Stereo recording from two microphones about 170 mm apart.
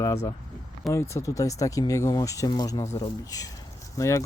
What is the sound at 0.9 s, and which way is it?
Speech, 15° left (ahead or behind).